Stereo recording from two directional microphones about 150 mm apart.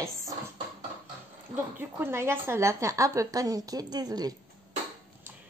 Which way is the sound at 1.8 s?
15° right (ahead or behind).